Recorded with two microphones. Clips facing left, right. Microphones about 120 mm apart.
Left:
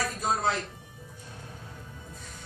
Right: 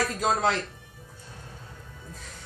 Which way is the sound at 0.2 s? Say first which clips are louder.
Right 3 dB; 90° right.